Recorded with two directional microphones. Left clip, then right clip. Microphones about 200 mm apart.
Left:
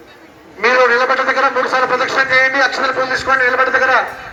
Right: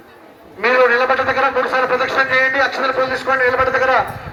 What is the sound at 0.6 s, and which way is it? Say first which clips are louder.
A man's voice: left 2 dB; 10° left (ahead or behind).